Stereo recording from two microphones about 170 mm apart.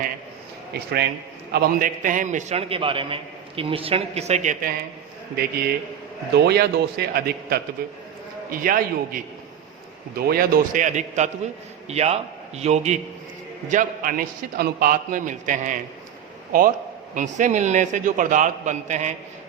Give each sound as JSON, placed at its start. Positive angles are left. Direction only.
{"t": 0.7, "sound": "a man's voice", "side_deg": -70}
{"t": 1.5, "sound": "a man's voice", "side_deg": -60}
{"t": 5.4, "sound": "a man's voice", "side_deg": -70}
{"t": 13.7, "sound": "a man's voice", "side_deg": -50}